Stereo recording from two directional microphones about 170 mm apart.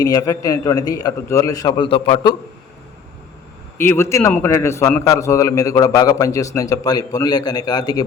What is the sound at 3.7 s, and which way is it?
A man's voice, 15° left (ahead or behind).